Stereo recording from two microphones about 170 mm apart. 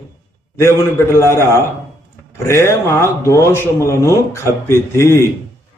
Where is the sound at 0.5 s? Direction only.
15° left (ahead or behind).